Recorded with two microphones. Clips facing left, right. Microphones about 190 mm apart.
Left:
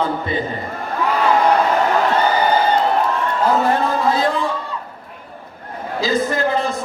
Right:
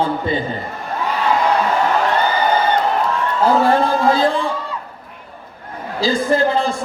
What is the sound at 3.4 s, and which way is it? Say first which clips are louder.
Speech: right 3 dB; 30° right (ahead or behind).